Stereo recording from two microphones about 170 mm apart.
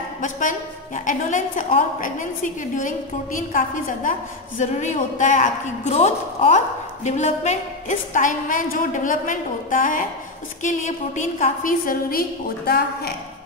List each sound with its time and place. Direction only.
0.2 s a woman's voice: 50° left (ahead or behind)